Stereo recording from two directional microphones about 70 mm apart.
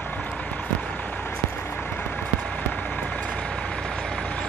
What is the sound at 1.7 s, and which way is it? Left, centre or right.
Vehicle, left.